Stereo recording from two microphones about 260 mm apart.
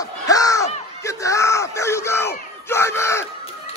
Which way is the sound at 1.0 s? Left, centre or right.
Centre.